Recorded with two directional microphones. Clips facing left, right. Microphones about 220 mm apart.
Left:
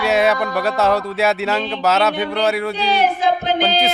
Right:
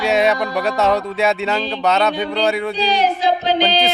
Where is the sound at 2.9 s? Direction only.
55° left (ahead or behind).